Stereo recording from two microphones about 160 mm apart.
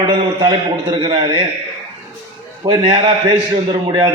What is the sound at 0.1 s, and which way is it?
A man's voice, 25° right (ahead or behind).